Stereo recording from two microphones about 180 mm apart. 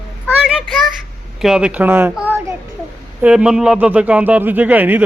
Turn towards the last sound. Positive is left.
turn(degrees=-10)  # may be behind; listen again after turning